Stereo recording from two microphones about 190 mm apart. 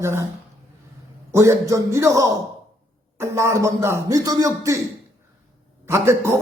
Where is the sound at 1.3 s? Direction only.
15° right (ahead or behind).